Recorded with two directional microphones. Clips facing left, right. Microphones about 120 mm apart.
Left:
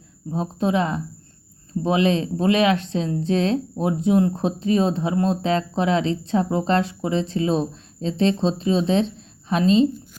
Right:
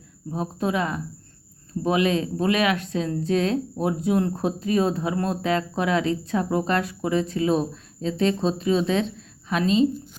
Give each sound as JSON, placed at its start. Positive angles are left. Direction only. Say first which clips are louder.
{"t": 0.3, "sound": "a woman's voice", "louder": "left 3 dB", "side_deg": 25}